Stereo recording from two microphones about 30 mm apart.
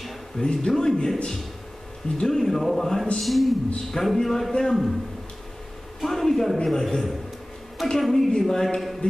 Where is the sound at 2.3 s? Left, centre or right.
Centre.